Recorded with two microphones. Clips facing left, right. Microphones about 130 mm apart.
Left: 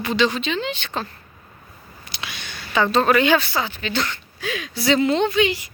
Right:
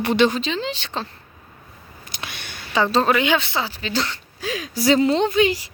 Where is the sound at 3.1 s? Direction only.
15° right (ahead or behind); by 5.6 s 35° right (ahead or behind).